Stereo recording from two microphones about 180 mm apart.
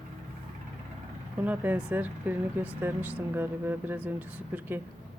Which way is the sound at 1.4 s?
10° right (ahead or behind).